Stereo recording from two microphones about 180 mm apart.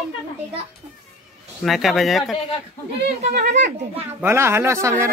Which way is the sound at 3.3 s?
65° right (ahead or behind).